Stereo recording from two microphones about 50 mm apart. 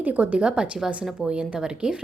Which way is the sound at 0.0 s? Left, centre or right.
Right.